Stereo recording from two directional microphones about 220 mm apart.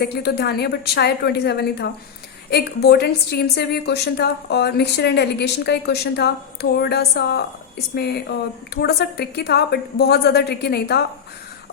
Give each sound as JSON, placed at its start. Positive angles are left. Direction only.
{"t": 0.0, "sound": "a woman's voice", "side_deg": 45}